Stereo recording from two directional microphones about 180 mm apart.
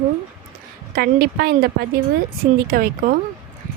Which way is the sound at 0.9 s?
60° right (ahead or behind).